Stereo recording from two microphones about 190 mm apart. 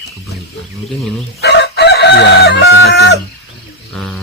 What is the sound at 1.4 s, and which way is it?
Speech, 60° left (ahead or behind).